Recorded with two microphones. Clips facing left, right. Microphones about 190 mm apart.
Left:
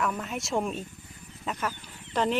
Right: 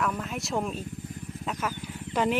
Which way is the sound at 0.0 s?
Centre (ahead or behind).